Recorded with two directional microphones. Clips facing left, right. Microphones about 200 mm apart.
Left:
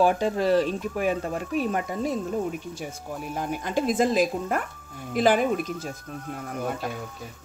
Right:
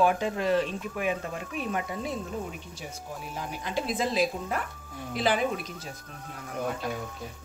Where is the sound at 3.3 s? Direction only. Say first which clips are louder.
Left 6 dB; 50° left (ahead or behind).